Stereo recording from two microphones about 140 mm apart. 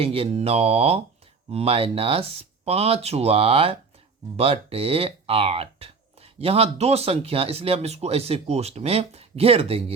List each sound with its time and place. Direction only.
0.0 s speech: 45° right (ahead or behind)